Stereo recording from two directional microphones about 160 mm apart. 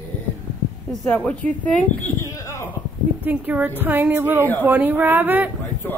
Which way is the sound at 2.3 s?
20° left (ahead or behind).